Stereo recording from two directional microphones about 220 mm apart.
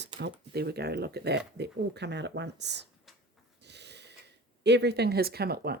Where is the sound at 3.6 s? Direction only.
50° right (ahead or behind).